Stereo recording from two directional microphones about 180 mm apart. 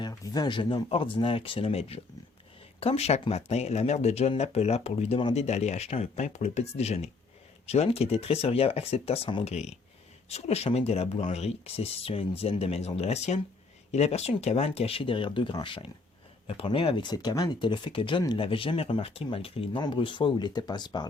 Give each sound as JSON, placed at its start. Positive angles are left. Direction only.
{"t": 0.0, "sound": "speech", "side_deg": 25}